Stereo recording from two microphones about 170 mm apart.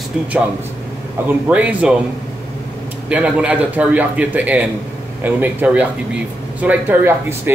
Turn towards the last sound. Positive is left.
turn(degrees=-10)  # may be behind; listen again after turning